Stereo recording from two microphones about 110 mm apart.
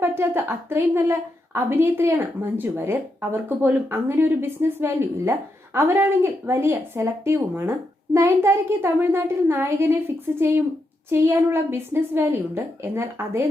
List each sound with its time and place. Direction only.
0.0 s a woman's voice: 20° right (ahead or behind)